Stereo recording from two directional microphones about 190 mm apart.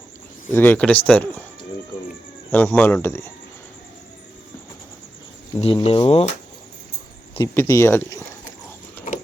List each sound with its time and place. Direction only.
0.5 s speech: 10° left (ahead or behind)
2.5 s speech: 10° left (ahead or behind)
5.5 s speech: 30° left (ahead or behind)
7.3 s speech: 15° left (ahead or behind)